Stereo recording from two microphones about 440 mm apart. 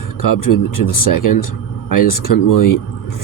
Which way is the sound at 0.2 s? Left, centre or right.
Left.